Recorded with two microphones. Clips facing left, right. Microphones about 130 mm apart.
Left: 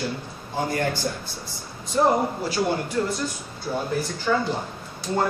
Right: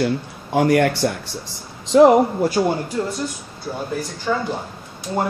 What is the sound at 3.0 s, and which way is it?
Speech, 20° right (ahead or behind).